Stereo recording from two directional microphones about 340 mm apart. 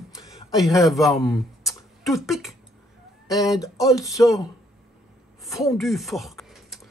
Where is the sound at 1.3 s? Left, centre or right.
Centre.